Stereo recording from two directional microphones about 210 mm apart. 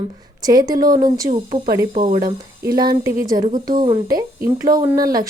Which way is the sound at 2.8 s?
20° right (ahead or behind).